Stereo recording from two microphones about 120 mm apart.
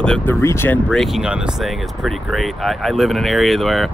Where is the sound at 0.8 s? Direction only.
Centre (ahead or behind).